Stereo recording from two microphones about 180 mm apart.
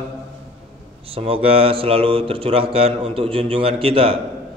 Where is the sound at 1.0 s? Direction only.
30° right (ahead or behind).